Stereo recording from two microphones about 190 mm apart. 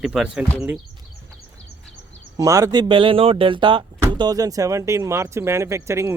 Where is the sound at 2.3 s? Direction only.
15° right (ahead or behind).